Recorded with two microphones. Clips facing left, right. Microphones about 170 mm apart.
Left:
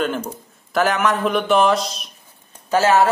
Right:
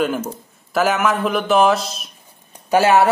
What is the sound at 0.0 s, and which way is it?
A man's voice, 5° right (ahead or behind).